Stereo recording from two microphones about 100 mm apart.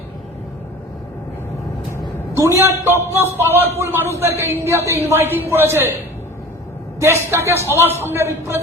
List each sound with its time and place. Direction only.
2.5 s a man's voice: 25° right (ahead or behind)
7.0 s a man's voice: 25° right (ahead or behind)